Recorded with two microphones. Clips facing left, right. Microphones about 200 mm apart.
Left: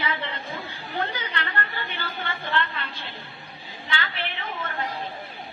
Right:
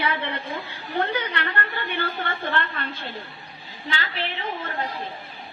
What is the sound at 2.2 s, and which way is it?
Speech, 50° right (ahead or behind).